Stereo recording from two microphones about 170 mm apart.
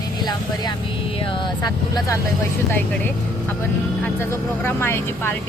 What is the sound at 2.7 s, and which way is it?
Speech, 10° left (ahead or behind).